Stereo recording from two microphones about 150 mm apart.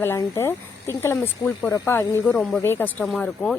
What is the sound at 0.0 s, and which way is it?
A woman's voice, 15° left (ahead or behind).